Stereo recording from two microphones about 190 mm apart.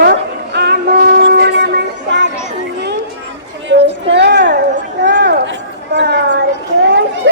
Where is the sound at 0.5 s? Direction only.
60° right (ahead or behind).